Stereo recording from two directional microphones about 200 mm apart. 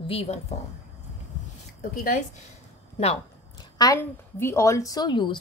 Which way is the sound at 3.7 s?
15° left (ahead or behind).